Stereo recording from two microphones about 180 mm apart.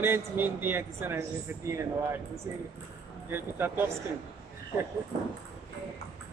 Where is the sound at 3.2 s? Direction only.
10° right (ahead or behind).